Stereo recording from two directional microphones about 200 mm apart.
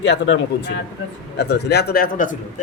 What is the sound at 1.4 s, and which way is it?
Speech, 55° left (ahead or behind).